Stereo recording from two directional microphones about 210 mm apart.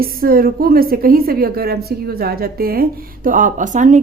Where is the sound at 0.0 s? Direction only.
45° right (ahead or behind).